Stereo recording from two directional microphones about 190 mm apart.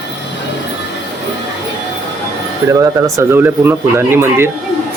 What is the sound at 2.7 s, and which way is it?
Speech, 15° right (ahead or behind).